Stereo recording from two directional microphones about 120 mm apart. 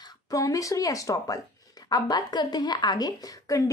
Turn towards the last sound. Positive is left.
turn(degrees=30)  # may be behind; listen again after turning